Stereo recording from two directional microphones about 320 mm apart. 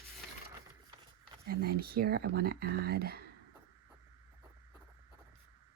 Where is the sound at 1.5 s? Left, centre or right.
Right.